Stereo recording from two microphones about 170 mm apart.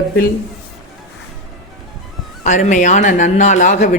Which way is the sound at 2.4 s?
45° left (ahead or behind).